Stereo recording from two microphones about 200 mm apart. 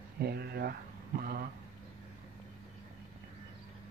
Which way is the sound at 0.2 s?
50° right (ahead or behind).